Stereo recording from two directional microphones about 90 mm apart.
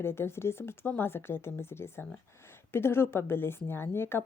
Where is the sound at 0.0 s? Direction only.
25° left (ahead or behind).